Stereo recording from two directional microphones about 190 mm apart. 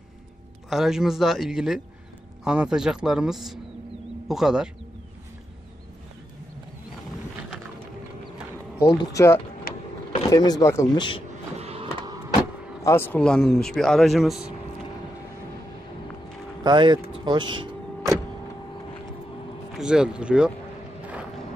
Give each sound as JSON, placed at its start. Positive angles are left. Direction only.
{"t": 0.7, "sound": "speech", "side_deg": 0}
{"t": 8.8, "sound": "speech", "side_deg": 15}
{"t": 9.7, "sound": "power windows", "side_deg": 50}
{"t": 10.3, "sound": "speech", "side_deg": 20}
{"t": 11.5, "sound": "a sound", "side_deg": -30}
{"t": 12.8, "sound": "speech", "side_deg": 10}
{"t": 16.6, "sound": "vehicle", "side_deg": -25}
{"t": 19.7, "sound": "speech", "side_deg": -5}